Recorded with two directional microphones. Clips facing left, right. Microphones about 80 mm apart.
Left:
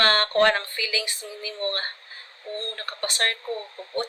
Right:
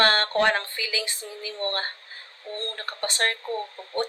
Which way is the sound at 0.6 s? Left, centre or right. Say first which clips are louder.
Left 1 dB; right.